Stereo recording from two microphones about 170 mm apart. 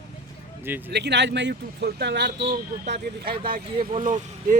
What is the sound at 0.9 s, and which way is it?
Speech, 85° right.